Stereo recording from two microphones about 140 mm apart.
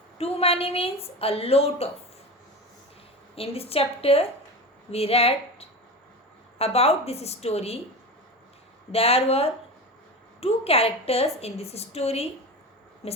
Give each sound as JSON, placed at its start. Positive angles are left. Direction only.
{"t": 0.2, "sound": "a woman's voice", "side_deg": 45}
{"t": 3.3, "sound": "a woman's voice", "side_deg": 45}
{"t": 8.9, "sound": "a woman's voice", "side_deg": 45}